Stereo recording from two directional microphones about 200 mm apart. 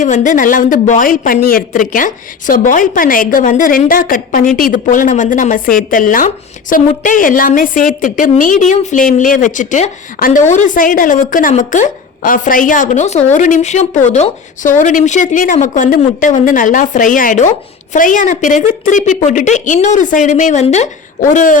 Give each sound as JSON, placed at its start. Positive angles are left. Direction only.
{"t": 0.0, "sound": "a woman's voice", "side_deg": 40}